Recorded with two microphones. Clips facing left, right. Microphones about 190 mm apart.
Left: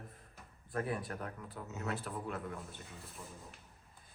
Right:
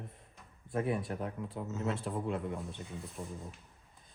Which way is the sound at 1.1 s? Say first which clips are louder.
Right 6 dB; 25° right (ahead or behind).